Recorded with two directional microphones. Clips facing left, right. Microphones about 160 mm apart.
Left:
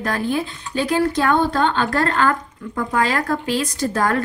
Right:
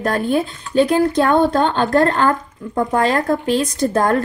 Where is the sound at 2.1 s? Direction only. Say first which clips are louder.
Right 2 dB; 25° right (ahead or behind).